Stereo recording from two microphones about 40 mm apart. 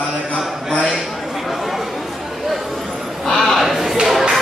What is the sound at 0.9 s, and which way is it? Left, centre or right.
Chatter, centre.